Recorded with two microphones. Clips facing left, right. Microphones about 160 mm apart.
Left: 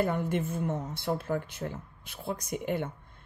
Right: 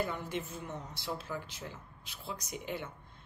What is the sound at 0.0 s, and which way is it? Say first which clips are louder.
Speech: left 7 dB; 55° left (ahead or behind).